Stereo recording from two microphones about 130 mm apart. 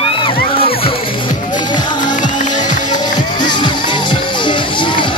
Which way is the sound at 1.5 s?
35° left (ahead or behind).